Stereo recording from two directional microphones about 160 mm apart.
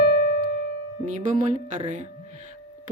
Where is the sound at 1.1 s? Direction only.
50° right (ahead or behind).